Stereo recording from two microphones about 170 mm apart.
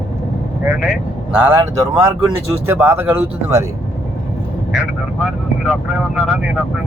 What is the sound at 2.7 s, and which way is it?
Speech, 10° right (ahead or behind).